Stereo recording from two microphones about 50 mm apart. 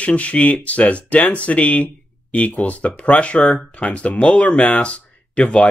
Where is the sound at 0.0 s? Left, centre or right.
Left.